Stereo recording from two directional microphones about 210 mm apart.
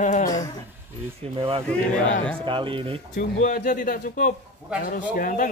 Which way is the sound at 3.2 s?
40° left (ahead or behind).